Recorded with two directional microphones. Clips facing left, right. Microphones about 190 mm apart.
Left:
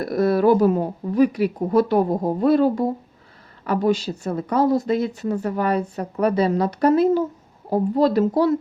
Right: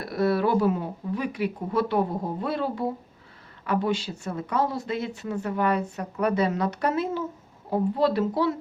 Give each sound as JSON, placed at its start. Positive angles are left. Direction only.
{"t": 0.0, "sound": "speech", "side_deg": 40}